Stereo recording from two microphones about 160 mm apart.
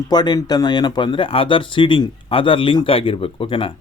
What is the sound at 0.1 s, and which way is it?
A man's voice, 25° left (ahead or behind).